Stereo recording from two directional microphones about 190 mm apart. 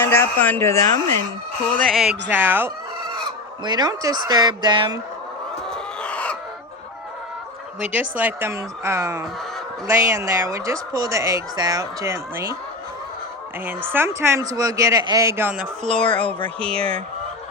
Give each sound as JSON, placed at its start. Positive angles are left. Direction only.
{"t": 0.0, "sound": "a sound", "side_deg": 10}
{"t": 1.7, "sound": "speech", "side_deg": 0}
{"t": 2.3, "sound": "speech", "side_deg": -10}
{"t": 3.6, "sound": "speech", "side_deg": -20}
{"t": 5.7, "sound": "chicken", "side_deg": 5}
{"t": 8.2, "sound": "speech", "side_deg": -15}
{"t": 13.7, "sound": "speech", "side_deg": -10}
{"t": 15.9, "sound": "speech", "side_deg": 5}